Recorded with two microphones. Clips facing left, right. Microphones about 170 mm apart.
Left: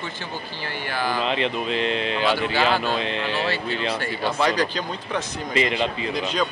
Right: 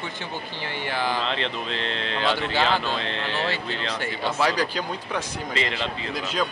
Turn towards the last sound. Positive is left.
turn(degrees=-5)  # may be behind; listen again after turning